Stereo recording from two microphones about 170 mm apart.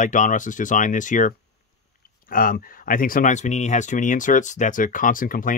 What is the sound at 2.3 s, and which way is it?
Speech, 55° left (ahead or behind).